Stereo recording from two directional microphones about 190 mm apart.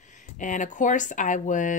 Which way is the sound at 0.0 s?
40° left (ahead or behind).